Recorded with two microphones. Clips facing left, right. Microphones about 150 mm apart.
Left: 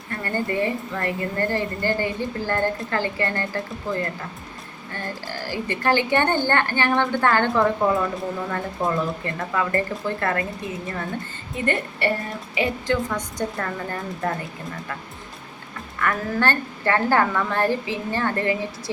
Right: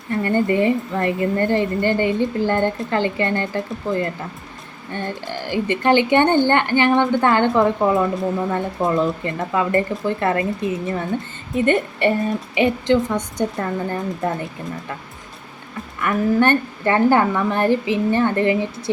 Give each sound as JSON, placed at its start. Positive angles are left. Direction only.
{"t": 0.1, "sound": "a woman's voice", "side_deg": -20}
{"t": 16.0, "sound": "a woman's voice", "side_deg": -20}